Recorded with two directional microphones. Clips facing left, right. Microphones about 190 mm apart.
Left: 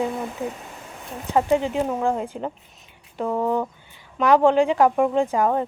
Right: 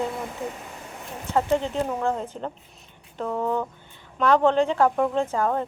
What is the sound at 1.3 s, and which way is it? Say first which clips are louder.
Speech: left 3 dB; 10° left (ahead or behind).